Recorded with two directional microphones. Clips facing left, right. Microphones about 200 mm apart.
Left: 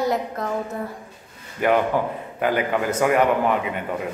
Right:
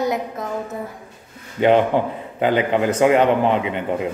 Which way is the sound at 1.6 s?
25° right (ahead or behind).